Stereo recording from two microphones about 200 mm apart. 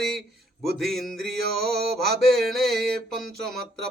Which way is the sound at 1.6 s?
50° right (ahead or behind).